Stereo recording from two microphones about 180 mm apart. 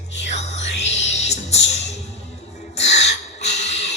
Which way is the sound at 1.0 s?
40° left (ahead or behind).